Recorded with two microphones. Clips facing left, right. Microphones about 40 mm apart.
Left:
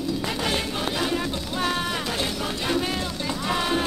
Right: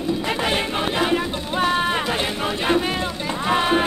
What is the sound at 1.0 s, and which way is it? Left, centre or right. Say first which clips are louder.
Music: right 5 dB; right.